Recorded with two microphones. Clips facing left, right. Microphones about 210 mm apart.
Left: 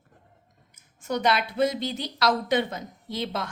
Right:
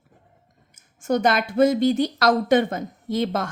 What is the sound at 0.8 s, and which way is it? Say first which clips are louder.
Speech: right 6 dB; 50° right (ahead or behind).